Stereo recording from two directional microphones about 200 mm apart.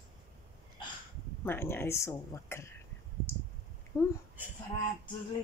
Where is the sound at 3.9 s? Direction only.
15° left (ahead or behind).